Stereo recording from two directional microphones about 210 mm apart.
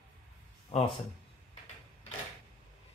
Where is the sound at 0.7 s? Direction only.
25° left (ahead or behind).